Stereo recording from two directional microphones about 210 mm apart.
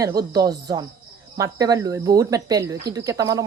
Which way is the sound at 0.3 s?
20° right (ahead or behind).